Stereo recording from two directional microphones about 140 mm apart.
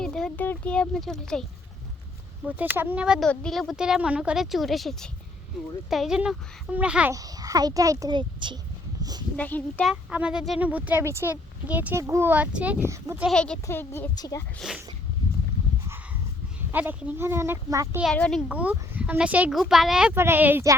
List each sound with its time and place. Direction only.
0.0 s speech: 5° left (ahead or behind)
2.4 s speech: 10° right (ahead or behind)
3.2 s speech: 5° left (ahead or behind)
7.1 s a child's voice: 25° right (ahead or behind)
9.0 s a sound: 25° right (ahead or behind)
9.3 s a child's voice: 10° left (ahead or behind)
9.9 s speech: 10° right (ahead or behind)
13.3 s a child's voice: 5° left (ahead or behind); by 14.4 s 25° left (ahead or behind)
14.6 s speech: 5° right (ahead or behind)
16.7 s speech: 10° right (ahead or behind)
18.0 s speech: 5° left (ahead or behind)
18.4 s speech: 10° right (ahead or behind)
20.1 s speech: 15° right (ahead or behind)